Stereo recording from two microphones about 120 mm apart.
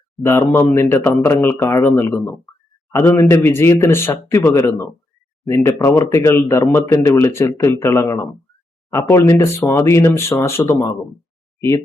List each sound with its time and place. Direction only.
0.2 s speech: 20° left (ahead or behind)